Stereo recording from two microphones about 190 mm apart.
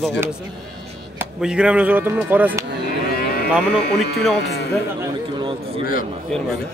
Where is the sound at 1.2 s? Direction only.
5° right (ahead or behind).